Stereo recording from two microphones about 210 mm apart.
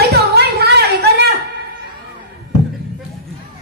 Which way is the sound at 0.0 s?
50° right (ahead or behind).